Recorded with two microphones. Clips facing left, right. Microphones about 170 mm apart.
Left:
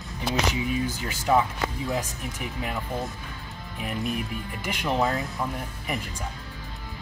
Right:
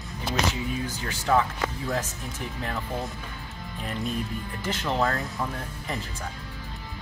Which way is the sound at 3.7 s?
15° left (ahead or behind).